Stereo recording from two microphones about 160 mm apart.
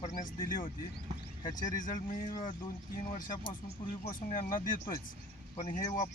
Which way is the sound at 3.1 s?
55° left (ahead or behind).